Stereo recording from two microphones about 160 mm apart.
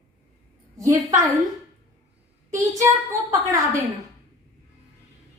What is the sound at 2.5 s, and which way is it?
A woman's voice, 20° right (ahead or behind).